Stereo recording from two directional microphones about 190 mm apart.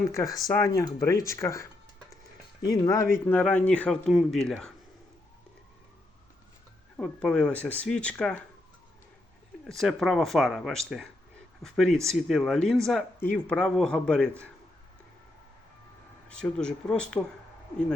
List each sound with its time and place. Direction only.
0.1 s speech: 15° left (ahead or behind)
6.9 s speech: 5° left (ahead or behind)
9.6 s speech: centre (ahead or behind)
16.4 s speech: 5° left (ahead or behind)